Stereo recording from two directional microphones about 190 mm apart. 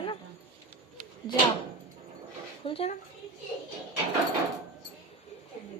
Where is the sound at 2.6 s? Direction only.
30° left (ahead or behind).